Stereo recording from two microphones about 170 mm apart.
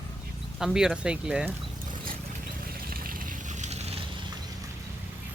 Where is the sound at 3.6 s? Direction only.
40° right (ahead or behind).